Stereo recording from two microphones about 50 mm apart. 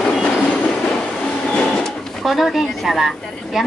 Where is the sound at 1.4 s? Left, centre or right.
Centre.